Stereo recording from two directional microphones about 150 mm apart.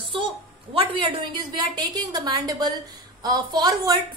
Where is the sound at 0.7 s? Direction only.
35° right (ahead or behind).